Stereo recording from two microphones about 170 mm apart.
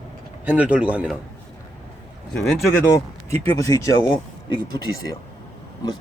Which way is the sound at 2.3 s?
Centre (ahead or behind).